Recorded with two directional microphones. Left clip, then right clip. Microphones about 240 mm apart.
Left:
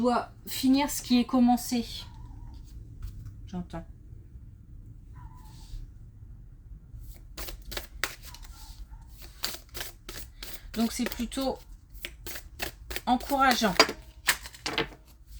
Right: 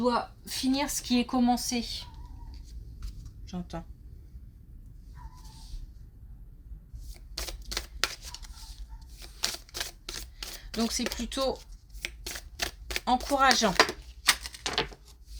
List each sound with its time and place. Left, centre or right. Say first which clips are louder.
0.0 s a woman's voice: left 1 dB; centre
3.4 s a woman's voice: even; right
7.1 s a sound: right 4 dB; centre
10.8 s a woman's voice: even; right
12.0 s a sound: right 3 dB; centre
13.1 s a woman's voice: even; right
14.4 s typewriter: even; centre